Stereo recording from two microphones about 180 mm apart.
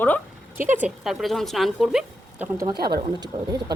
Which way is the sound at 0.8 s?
5° right (ahead or behind).